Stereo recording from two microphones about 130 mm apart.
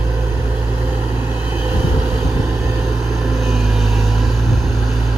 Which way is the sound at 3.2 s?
Centre (ahead or behind).